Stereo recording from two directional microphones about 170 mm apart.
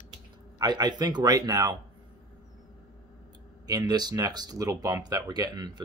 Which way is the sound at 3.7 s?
20° right (ahead or behind).